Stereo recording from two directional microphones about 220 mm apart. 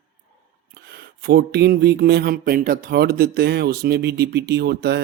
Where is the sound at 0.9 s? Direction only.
45° right (ahead or behind).